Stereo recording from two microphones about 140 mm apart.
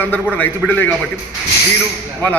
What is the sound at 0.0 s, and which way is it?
Speech, 15° left (ahead or behind).